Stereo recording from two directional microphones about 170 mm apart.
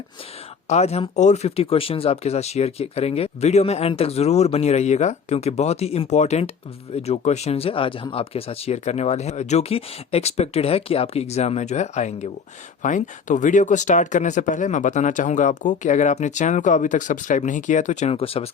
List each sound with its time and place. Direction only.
0.7 s speech: 40° left (ahead or behind)